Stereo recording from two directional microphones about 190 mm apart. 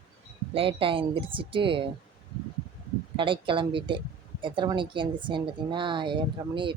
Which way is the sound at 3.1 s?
25° right (ahead or behind).